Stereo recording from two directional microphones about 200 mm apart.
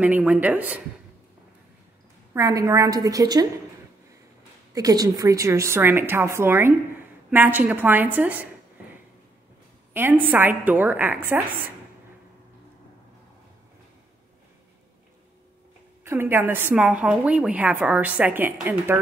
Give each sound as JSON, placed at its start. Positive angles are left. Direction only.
{"t": 0.0, "sound": "a woman's voice", "side_deg": -10}
{"t": 2.3, "sound": "a woman's voice", "side_deg": -15}
{"t": 4.7, "sound": "a woman's voice", "side_deg": -20}
{"t": 9.9, "sound": "a woman's voice", "side_deg": -10}
{"t": 16.0, "sound": "a woman's voice", "side_deg": -10}